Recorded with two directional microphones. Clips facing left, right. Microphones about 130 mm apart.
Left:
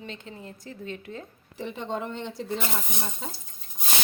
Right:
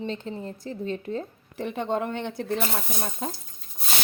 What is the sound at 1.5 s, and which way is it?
Speech, 55° right (ahead or behind).